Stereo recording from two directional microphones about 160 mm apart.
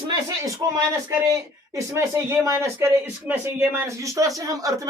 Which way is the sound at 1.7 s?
20° right (ahead or behind).